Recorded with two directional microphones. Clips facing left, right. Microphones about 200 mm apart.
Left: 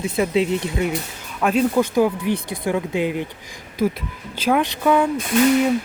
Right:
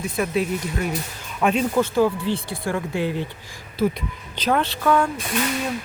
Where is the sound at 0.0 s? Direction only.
25° left (ahead or behind).